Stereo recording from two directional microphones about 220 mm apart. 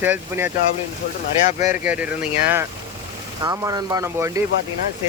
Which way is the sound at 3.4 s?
15° right (ahead or behind).